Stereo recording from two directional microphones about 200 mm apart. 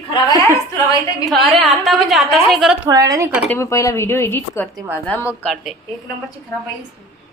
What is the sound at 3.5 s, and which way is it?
Speech, 15° left (ahead or behind).